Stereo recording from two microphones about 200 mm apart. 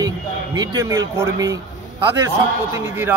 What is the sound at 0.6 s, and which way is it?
A man's voice, 15° right (ahead or behind).